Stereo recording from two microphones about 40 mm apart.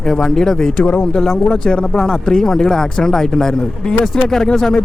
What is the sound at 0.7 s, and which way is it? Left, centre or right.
A man's voice, left.